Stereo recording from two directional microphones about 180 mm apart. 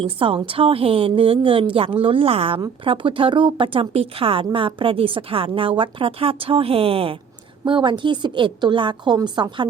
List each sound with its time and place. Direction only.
0.2 s a woman's voice: 30° right (ahead or behind)